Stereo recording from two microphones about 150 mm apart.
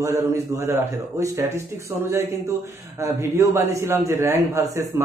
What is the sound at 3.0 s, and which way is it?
A man's voice, 20° right (ahead or behind).